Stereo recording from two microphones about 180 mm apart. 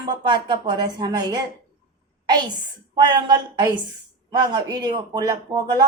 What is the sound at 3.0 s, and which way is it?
A woman's voice, 25° right (ahead or behind).